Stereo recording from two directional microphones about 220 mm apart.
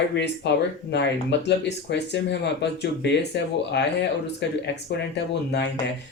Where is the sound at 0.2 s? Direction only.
50° left (ahead or behind).